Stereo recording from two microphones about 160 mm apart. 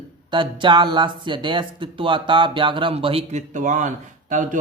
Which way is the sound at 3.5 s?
50° right (ahead or behind).